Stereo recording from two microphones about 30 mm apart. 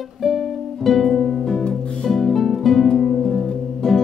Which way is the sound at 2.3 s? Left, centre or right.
Centre.